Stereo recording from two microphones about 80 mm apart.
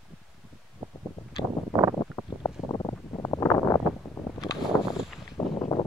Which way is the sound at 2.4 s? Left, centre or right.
Left.